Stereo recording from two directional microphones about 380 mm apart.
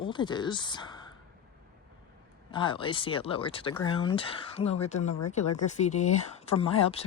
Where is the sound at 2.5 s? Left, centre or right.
Centre.